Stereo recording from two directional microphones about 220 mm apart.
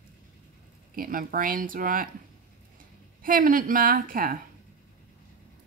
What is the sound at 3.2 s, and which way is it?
Speech, 40° right (ahead or behind).